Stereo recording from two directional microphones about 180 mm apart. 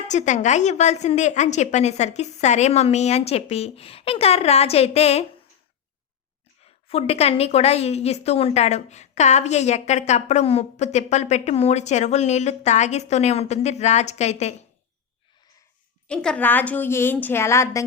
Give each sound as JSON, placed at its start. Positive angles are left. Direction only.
{"t": 0.1, "sound": "a woman's voice", "side_deg": 40}
{"t": 6.8, "sound": "a woman's voice", "side_deg": 35}
{"t": 16.0, "sound": "a woman's voice", "side_deg": 5}